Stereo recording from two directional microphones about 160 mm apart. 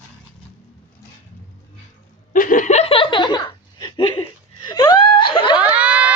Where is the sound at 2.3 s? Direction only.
55° left (ahead or behind); by 4.3 s 30° left (ahead or behind).